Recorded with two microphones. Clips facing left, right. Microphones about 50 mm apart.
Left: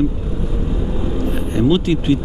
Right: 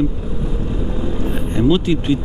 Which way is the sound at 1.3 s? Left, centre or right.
Centre.